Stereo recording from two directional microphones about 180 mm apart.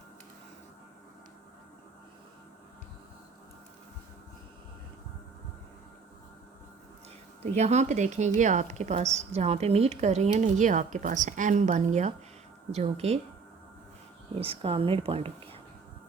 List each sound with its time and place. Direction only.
7.5 s a woman's voice: 40° right (ahead or behind)
14.3 s a woman's voice: 30° right (ahead or behind)